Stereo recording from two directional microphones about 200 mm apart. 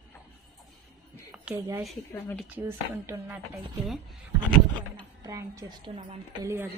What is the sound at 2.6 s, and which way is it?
Speech, 10° right (ahead or behind).